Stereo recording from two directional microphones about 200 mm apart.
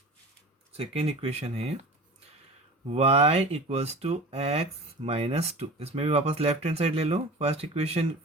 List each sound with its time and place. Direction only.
0.7 s speech: 30° right (ahead or behind)
2.8 s speech: 30° right (ahead or behind)